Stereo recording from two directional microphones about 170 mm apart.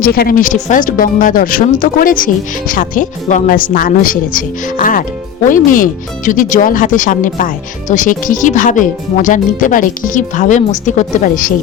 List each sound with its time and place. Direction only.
0.0 s speech: 60° left (ahead or behind)